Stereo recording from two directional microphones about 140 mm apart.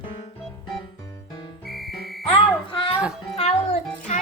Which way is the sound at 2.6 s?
35° left (ahead or behind).